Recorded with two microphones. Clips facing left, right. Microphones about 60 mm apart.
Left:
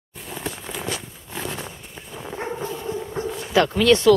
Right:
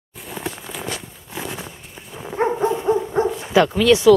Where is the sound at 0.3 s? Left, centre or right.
Centre.